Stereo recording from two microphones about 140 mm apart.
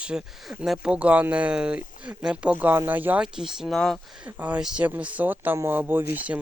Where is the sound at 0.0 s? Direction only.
5° right (ahead or behind).